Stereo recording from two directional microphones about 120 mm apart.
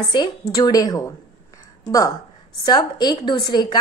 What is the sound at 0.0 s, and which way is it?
Speech, 40° left (ahead or behind).